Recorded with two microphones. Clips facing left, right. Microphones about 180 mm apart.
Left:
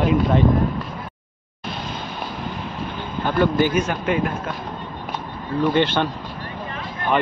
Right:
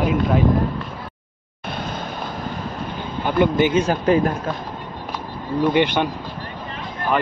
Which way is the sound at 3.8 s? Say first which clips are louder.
Right 4 dB; 35° right (ahead or behind).